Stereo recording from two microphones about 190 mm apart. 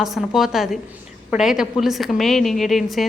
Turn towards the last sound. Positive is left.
turn(degrees=0)  # may be behind; listen again after turning